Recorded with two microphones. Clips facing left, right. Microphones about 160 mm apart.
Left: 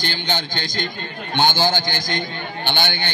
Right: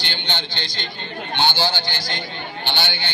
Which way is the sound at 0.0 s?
45° left (ahead or behind).